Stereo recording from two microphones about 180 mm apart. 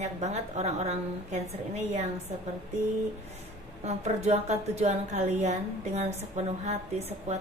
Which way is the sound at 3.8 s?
40° right (ahead or behind).